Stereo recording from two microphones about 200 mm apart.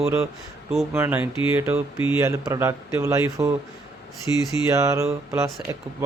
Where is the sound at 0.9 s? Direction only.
10° right (ahead or behind).